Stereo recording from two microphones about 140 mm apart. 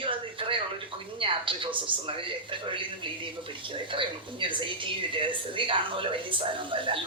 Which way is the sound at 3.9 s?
35° right (ahead or behind).